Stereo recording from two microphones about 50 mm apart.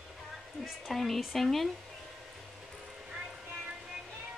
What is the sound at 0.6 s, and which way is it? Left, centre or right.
A woman's voice, centre.